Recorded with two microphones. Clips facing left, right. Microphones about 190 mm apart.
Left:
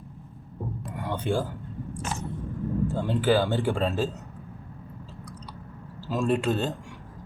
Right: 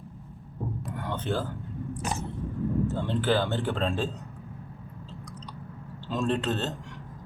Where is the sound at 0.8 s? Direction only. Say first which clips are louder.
Left 4 dB; 10° left (ahead or behind).